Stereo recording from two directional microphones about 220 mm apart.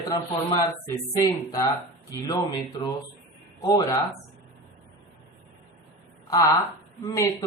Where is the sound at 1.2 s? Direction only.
15° left (ahead or behind).